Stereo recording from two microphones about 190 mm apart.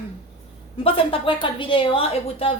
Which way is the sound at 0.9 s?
30° left (ahead or behind).